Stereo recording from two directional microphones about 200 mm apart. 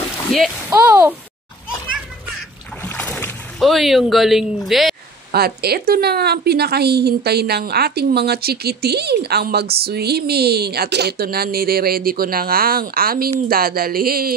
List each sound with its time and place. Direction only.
0.7 s speech: 10° right (ahead or behind)
2.8 s boat: 10° left (ahead or behind)
4.6 s speech: centre (ahead or behind)
5.3 s a woman's voice: 50° right (ahead or behind)